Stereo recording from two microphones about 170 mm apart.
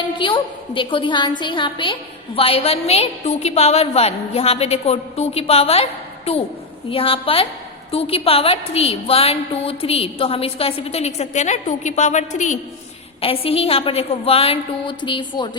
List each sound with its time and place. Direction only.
0.2 s a woman's voice: 30° left (ahead or behind)
13.2 s a woman's voice: 35° left (ahead or behind)